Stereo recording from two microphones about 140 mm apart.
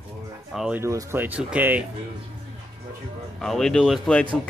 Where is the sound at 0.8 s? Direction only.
20° right (ahead or behind).